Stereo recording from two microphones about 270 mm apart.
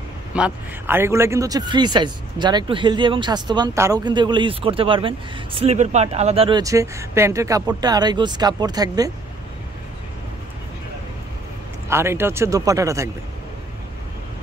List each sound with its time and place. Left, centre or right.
0.3 s speech: centre
11.9 s speech: centre